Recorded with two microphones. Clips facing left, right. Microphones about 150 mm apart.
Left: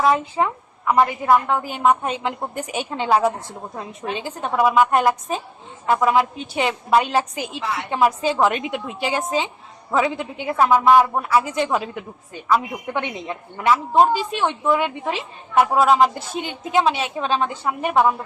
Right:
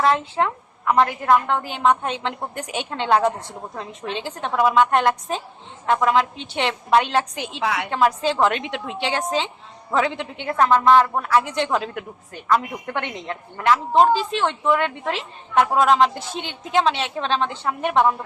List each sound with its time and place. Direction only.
0.0 s a woman's voice: 5° left (ahead or behind)
7.6 s a woman's voice: 70° right (ahead or behind)
7.9 s a woman's voice: 10° left (ahead or behind)